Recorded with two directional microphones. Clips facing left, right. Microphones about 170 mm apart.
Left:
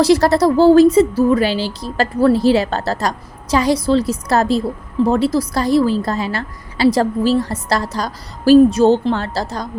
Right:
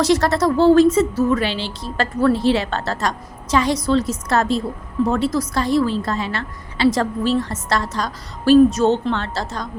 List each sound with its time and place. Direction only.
0.0 s a woman's voice: 35° left (ahead or behind)